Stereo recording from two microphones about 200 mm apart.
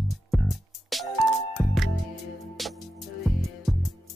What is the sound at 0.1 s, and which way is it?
Music, centre (ahead or behind).